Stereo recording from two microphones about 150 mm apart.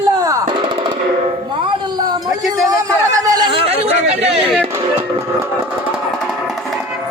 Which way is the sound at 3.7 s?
40° right (ahead or behind).